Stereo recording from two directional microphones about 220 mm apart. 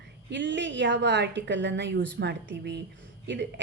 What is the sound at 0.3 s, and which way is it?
A woman's voice, 55° right (ahead or behind).